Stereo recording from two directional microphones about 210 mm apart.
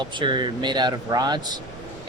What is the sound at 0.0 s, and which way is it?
Speech, 20° right (ahead or behind).